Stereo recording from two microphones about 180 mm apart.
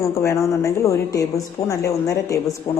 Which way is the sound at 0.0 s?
15° left (ahead or behind).